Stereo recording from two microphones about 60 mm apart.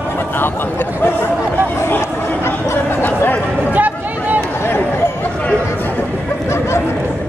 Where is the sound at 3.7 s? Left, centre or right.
Right.